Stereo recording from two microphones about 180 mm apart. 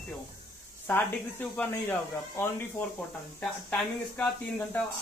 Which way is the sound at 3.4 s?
5° left (ahead or behind).